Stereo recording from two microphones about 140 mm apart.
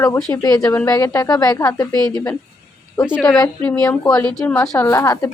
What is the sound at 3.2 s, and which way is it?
Speech, 5° left (ahead or behind).